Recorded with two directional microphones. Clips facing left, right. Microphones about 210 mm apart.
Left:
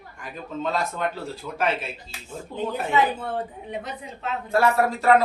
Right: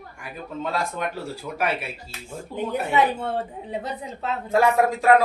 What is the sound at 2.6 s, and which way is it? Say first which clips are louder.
Speech: right 1 dB; 20° right (ahead or behind).